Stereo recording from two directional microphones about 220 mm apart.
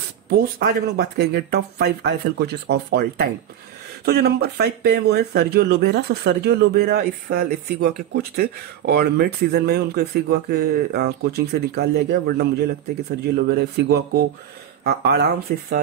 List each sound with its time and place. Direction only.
0.3 s speech: 45° right (ahead or behind)